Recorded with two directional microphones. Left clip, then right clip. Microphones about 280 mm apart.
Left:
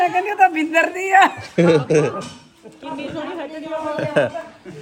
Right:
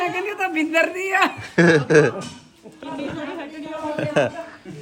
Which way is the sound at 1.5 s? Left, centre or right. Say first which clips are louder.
Right 2 dB; centre.